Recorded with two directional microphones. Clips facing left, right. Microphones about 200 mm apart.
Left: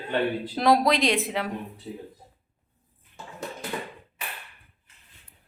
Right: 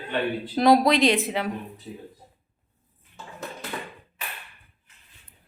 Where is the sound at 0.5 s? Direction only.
Centre (ahead or behind).